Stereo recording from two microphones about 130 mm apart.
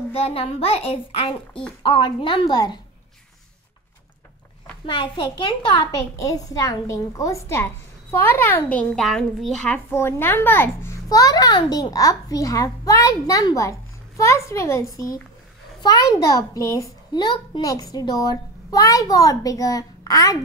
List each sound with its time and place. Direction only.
0.1 s a child's voice: 50° left (ahead or behind)
4.8 s a child's voice: 40° left (ahead or behind); by 9.0 s 10° left (ahead or behind)
9.0 s speech: centre (ahead or behind)
9.9 s a child's voice: 20° left (ahead or behind)
11.1 s a child's voice: 30° left (ahead or behind)
17.1 s a child's voice: 35° left (ahead or behind)